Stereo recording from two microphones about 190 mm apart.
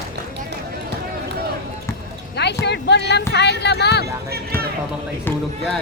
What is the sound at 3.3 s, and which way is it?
Speech, 65° left (ahead or behind).